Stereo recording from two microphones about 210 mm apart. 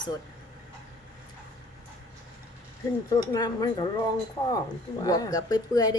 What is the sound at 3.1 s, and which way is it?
Speech, 15° left (ahead or behind).